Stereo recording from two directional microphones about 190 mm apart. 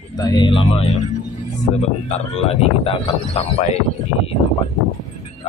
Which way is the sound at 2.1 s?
30° left (ahead or behind).